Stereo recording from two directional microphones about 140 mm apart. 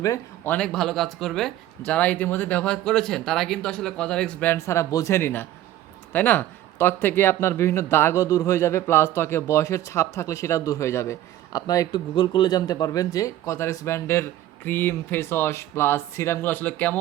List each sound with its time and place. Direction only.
0.0 s a man's voice: 25° left (ahead or behind)
0.5 s speech: 5° left (ahead or behind)